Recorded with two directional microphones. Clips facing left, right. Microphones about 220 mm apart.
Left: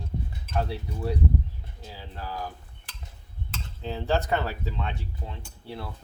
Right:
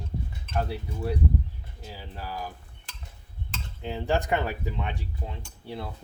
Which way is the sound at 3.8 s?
15° right (ahead or behind).